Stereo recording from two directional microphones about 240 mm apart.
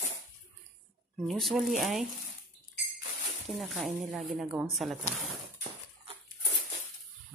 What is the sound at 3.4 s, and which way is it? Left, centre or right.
Speech, centre.